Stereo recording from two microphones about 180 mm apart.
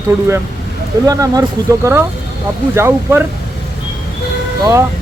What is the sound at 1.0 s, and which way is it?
Speech, 20° right (ahead or behind).